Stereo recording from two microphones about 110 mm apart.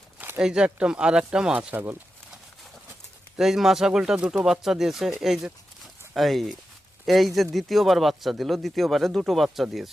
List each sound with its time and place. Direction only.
0.2 s speech: 10° right (ahead or behind)
1.7 s speech: 20° right (ahead or behind)
3.3 s speech: 5° right (ahead or behind)